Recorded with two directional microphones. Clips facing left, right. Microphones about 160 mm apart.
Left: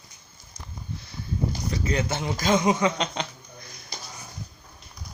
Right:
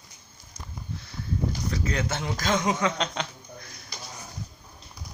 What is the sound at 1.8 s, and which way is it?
A man's voice, 5° left (ahead or behind).